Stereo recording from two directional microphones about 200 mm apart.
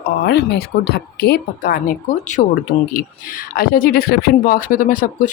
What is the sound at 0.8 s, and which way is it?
Speech, 55° left (ahead or behind).